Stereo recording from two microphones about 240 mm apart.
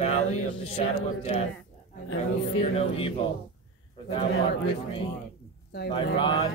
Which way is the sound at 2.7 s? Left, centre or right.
Left.